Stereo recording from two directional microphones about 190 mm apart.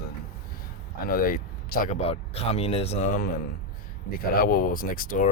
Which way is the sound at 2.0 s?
35° left (ahead or behind).